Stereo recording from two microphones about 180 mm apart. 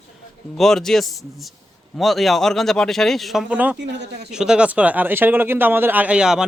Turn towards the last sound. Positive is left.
turn(degrees=-5)  # may be behind; listen again after turning